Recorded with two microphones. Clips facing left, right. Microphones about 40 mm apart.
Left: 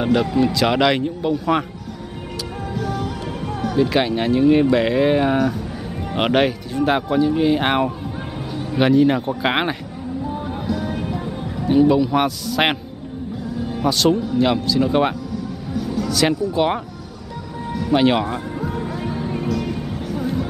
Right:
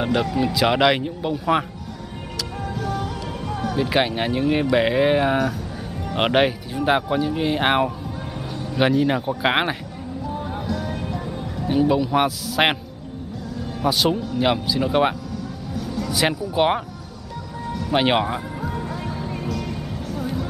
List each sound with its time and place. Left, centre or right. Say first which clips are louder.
0.0 s speech: left 4 dB; centre
2.7 s music: left 3 dB; centre
3.7 s speech: left 3 dB; centre
10.3 s music: even; centre
11.6 s speech: left 4 dB; centre
13.8 s speech: left 3 dB; centre
15.7 s a sound: left 4 dB; centre
16.1 s speech: left 3 dB; centre
17.9 s speech: left 3 dB; right
18.6 s music: left 3 dB; centre